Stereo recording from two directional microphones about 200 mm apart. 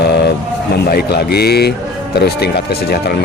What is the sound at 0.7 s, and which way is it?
Speech, 55° left (ahead or behind).